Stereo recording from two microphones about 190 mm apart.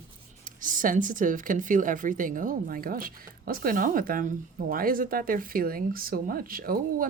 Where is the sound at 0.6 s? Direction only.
45° right (ahead or behind).